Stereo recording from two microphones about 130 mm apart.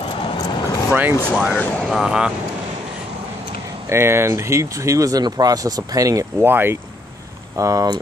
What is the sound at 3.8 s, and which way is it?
Speech, 20° right (ahead or behind).